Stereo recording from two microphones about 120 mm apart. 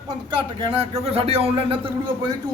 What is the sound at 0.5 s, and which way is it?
A man's voice, 50° right (ahead or behind).